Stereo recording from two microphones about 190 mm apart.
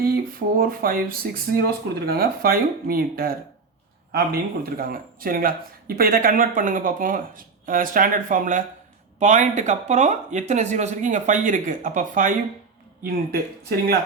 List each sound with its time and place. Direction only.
0.0 s speech: 50° right (ahead or behind)